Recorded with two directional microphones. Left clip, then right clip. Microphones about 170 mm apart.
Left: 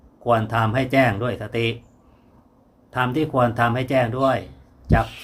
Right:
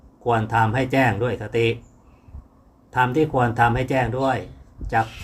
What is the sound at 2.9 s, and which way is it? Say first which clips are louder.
Speech: right 3 dB; 15° left (ahead or behind).